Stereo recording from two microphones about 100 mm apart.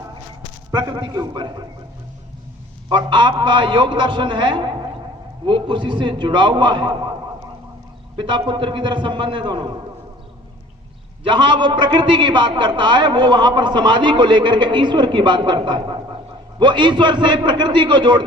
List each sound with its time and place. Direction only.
0.7 s a man's voice: 45° right (ahead or behind)
2.9 s a man's voice: 50° right (ahead or behind)
8.1 s a man's voice: 50° right (ahead or behind)
11.3 s a man's voice: 50° right (ahead or behind)